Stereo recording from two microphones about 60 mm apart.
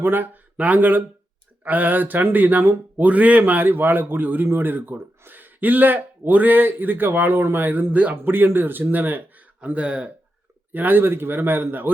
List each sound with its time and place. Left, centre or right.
0.0 s speech: right
9.6 s speech: right
10.7 s speech: right